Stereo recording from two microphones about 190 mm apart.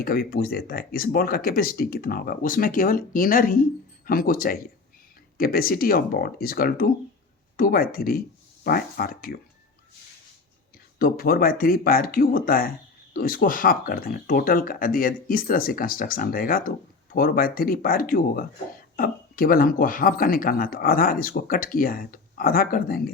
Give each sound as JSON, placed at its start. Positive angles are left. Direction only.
{"t": 0.0, "sound": "speech", "side_deg": 50}
{"t": 11.0, "sound": "speech", "side_deg": 50}